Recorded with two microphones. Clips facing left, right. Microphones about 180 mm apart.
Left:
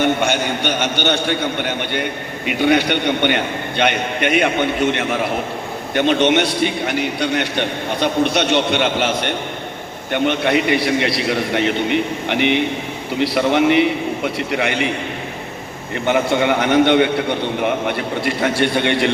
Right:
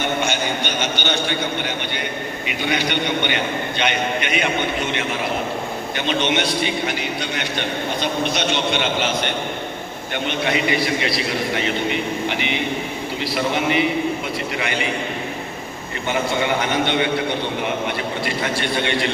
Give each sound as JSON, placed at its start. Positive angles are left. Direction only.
{"t": 0.2, "sound": "a man's voice", "side_deg": 55}
{"t": 10.1, "sound": "a man's voice", "side_deg": 60}
{"t": 16.0, "sound": "a man's voice", "side_deg": 60}
{"t": 18.4, "sound": "a man's voice", "side_deg": 60}